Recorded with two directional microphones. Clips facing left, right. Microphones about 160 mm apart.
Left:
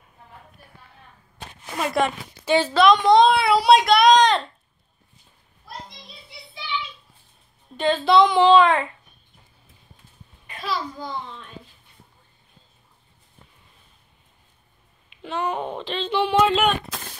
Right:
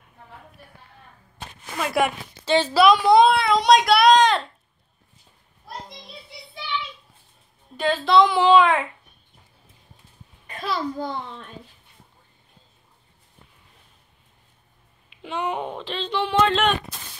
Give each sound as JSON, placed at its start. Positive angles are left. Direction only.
{"t": 1.9, "sound": "a woman's voice", "side_deg": -10}
{"t": 2.4, "sound": "a woman's voice", "side_deg": 10}
{"t": 2.7, "sound": "a woman's voice", "side_deg": -5}
{"t": 3.3, "sound": "speech", "side_deg": 5}
{"t": 7.7, "sound": "a woman's voice", "side_deg": -5}
{"t": 10.4, "sound": "a child's voice", "side_deg": -45}
{"t": 15.2, "sound": "a woman's voice", "side_deg": -15}
{"t": 15.7, "sound": "speech", "side_deg": 0}